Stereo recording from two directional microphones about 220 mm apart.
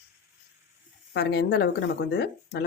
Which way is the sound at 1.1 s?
50° left (ahead or behind).